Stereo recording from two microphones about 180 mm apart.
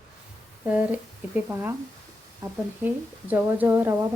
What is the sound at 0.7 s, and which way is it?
A woman's voice, 10° right (ahead or behind).